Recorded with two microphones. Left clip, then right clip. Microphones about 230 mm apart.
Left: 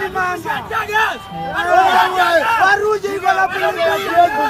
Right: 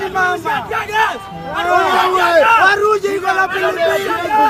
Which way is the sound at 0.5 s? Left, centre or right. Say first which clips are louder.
Right 1 dB; centre.